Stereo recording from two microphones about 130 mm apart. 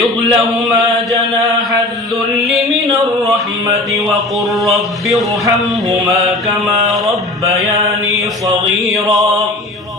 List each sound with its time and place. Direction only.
0.0 s a sound: centre (ahead or behind)
4.6 s speech: centre (ahead or behind)
7.4 s mantra: 25° right (ahead or behind)
8.9 s speech: centre (ahead or behind)